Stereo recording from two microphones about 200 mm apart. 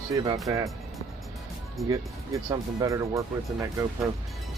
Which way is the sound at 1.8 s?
15° right (ahead or behind).